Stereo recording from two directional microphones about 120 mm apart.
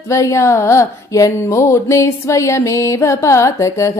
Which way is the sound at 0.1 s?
25° left (ahead or behind).